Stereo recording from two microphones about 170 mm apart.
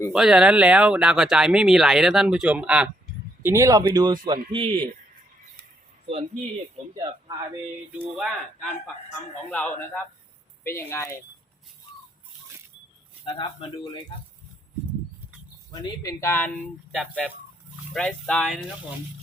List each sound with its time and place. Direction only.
0.1 s speech: 5° right (ahead or behind)
3.4 s speech: 15° right (ahead or behind)
6.1 s speech: 35° right (ahead or behind)
7.9 s speech: 10° right (ahead or behind)
9.5 s speech: 10° left (ahead or behind)
13.2 s speech: 30° left (ahead or behind)
15.7 s speech: 20° left (ahead or behind)
16.9 s speech: centre (ahead or behind)